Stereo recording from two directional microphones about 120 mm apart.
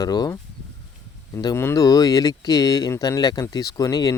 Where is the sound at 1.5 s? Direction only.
25° left (ahead or behind).